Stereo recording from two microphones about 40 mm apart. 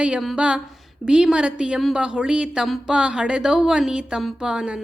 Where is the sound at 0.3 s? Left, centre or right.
Right.